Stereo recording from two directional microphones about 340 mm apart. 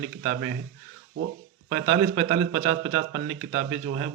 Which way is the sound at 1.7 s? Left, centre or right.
Right.